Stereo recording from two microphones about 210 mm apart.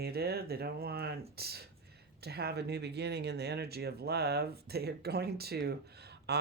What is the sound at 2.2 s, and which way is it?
Speech, 50° right (ahead or behind).